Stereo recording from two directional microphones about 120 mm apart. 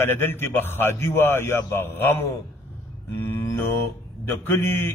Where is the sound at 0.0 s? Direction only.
15° left (ahead or behind).